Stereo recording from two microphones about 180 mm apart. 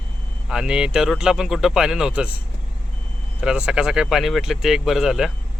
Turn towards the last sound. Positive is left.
turn(degrees=0)  # may be behind; listen again after turning